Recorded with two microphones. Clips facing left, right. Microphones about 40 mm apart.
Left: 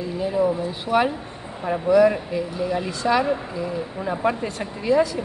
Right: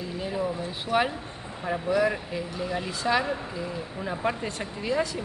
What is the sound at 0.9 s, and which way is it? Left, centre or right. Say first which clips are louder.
Speech: left 5 dB; centre.